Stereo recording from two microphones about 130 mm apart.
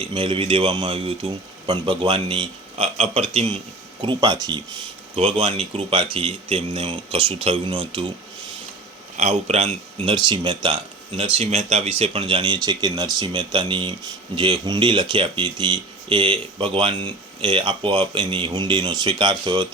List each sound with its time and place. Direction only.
0.1 s a man's voice: 45° right (ahead or behind)
4.0 s speech: 35° right (ahead or behind)
5.1 s a man's voice: 50° right (ahead or behind)
9.1 s a man's voice: 60° right (ahead or behind); by 10.8 s 40° right (ahead or behind)
11.2 s a man's voice: 50° right (ahead or behind)